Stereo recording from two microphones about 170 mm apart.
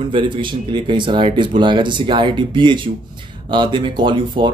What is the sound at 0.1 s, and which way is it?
Speech, 30° right (ahead or behind).